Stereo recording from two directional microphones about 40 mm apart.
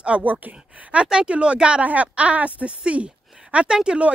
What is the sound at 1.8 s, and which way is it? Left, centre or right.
Speech, right.